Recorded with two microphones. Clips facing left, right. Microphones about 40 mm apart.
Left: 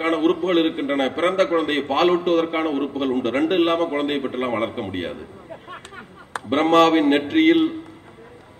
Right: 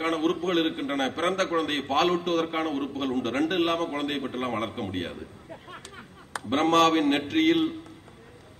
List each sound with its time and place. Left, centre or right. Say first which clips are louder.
0.0 s a man's voice: left 6 dB; left
5.7 s a sound: left 6 dB; left
6.5 s a man's voice: left 5 dB; left